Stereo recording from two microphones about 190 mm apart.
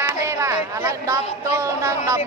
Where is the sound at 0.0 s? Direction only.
15° right (ahead or behind).